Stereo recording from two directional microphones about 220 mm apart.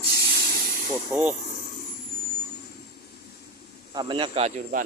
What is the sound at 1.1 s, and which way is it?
Speech, 10° right (ahead or behind).